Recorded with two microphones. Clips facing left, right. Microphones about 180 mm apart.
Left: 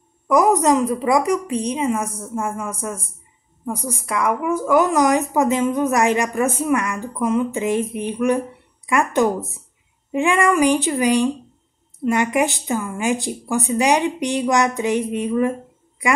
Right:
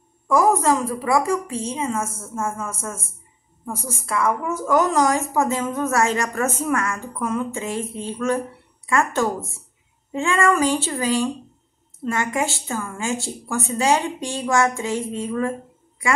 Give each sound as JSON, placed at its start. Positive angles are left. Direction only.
{"t": 0.3, "sound": "a woman's voice", "side_deg": 15}